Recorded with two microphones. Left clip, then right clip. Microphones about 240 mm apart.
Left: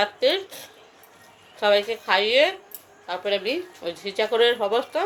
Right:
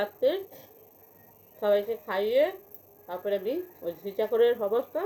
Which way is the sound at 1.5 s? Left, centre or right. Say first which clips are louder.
Left 5 dB; left.